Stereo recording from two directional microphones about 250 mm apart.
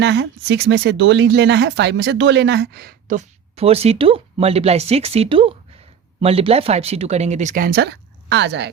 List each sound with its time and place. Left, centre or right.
0.0 s speech: right